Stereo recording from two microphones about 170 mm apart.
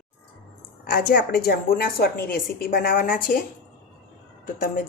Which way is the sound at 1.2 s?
65° left (ahead or behind).